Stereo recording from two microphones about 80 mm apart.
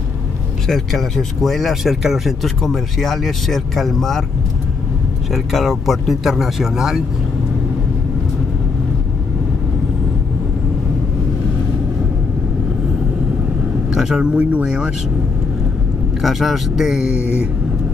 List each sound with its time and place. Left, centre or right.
0.7 s speech: centre
5.3 s speech: centre
13.9 s speech: centre
16.2 s speech: centre
17.1 s a sound: left